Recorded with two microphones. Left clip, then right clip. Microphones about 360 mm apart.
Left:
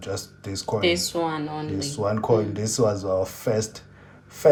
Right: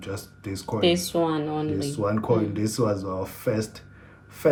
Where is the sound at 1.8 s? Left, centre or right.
Centre.